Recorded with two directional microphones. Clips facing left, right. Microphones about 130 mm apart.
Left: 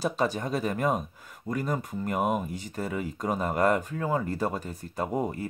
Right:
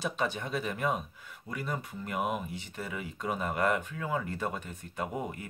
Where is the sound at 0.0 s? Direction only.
40° left (ahead or behind).